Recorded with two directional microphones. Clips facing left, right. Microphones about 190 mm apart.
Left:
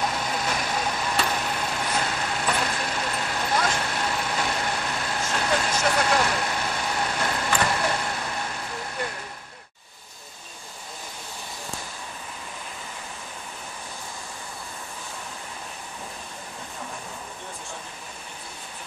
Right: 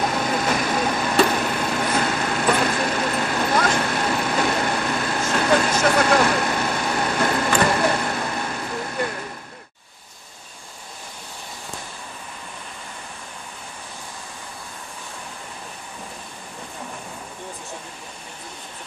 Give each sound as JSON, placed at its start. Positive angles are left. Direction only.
{"t": 0.1, "sound": "vehicle", "side_deg": -65}